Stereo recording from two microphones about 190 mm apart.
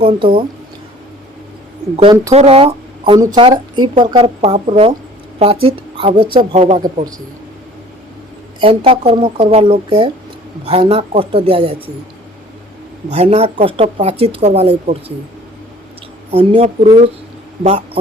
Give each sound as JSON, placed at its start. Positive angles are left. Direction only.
{"t": 0.0, "sound": "a woman's voice", "side_deg": -25}
{"t": 2.3, "sound": "a woman's voice", "side_deg": -35}
{"t": 8.6, "sound": "a woman's voice", "side_deg": -30}
{"t": 13.1, "sound": "speech", "side_deg": -35}
{"t": 16.3, "sound": "speech", "side_deg": -30}